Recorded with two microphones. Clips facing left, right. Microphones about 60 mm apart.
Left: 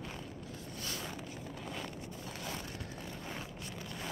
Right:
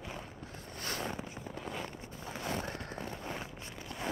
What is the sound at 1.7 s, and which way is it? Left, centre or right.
Walk, right.